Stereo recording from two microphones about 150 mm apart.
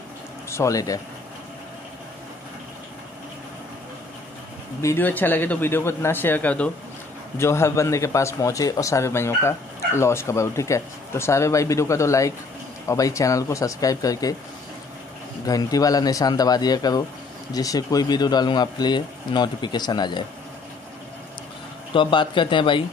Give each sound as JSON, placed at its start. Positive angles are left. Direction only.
{"t": 0.5, "sound": "a man's voice", "side_deg": 20}
{"t": 4.8, "sound": "a man's voice", "side_deg": 15}
{"t": 15.4, "sound": "a man's voice", "side_deg": 25}
{"t": 21.9, "sound": "a man's voice", "side_deg": 35}